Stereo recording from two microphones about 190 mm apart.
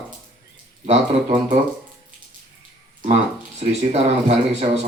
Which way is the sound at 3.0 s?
35° right (ahead or behind).